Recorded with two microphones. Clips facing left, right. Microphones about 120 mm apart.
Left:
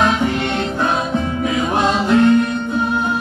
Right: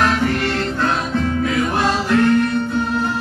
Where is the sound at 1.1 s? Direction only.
15° left (ahead or behind).